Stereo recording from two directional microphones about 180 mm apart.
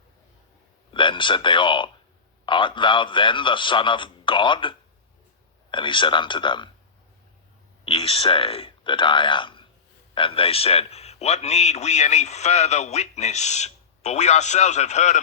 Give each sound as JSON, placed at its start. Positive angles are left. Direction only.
{"t": 0.9, "sound": "a man's voice", "side_deg": 25}
{"t": 7.9, "sound": "a man's voice", "side_deg": 30}